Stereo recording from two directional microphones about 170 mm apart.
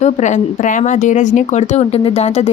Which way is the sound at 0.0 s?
45° left (ahead or behind).